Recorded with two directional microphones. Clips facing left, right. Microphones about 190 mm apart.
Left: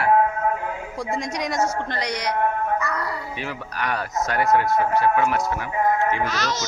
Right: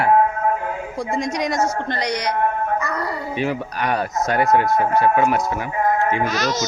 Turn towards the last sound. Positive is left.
turn(degrees=-15)  # may be behind; listen again after turning